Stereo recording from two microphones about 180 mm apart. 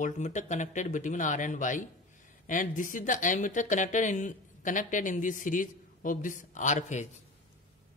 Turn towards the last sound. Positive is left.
turn(degrees=40)  # may be behind; listen again after turning